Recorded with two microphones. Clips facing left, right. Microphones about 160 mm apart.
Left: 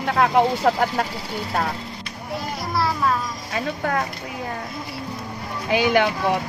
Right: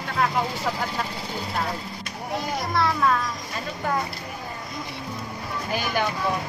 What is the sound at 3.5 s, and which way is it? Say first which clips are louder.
Speech: left 6 dB; 70° left (ahead or behind).